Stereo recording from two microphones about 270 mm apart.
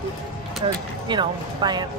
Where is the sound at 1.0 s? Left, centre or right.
Centre.